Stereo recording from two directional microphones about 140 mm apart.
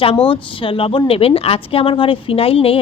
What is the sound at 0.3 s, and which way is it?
Speech, 40° left (ahead or behind).